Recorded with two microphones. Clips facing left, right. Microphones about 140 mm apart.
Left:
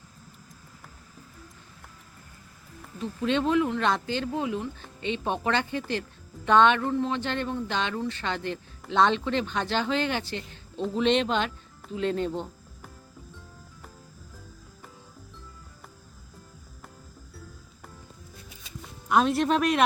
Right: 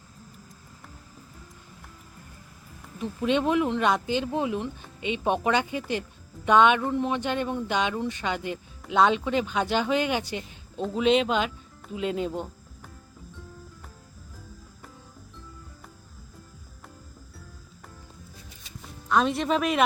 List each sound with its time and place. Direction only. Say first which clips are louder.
3.0 s speech: right 1 dB; 15° right (ahead or behind)
19.0 s speech: left 1 dB; 5° left (ahead or behind)